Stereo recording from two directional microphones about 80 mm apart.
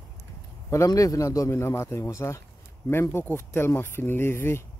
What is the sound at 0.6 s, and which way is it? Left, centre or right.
Speech, left.